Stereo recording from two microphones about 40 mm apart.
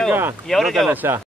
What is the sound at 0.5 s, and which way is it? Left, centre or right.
Speech, centre.